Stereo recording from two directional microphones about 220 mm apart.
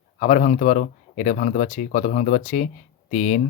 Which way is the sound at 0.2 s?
35° left (ahead or behind).